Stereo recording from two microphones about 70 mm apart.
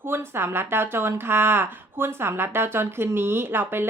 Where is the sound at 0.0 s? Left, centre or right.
Right.